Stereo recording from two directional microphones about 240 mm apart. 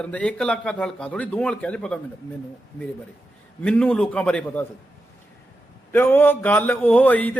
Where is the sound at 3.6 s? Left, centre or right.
Centre.